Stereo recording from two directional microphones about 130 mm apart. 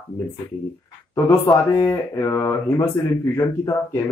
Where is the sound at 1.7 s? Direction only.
20° left (ahead or behind).